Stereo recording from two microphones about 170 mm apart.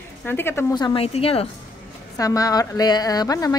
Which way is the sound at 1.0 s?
35° left (ahead or behind).